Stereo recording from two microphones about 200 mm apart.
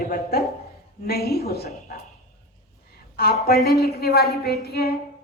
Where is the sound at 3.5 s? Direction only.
Centre (ahead or behind).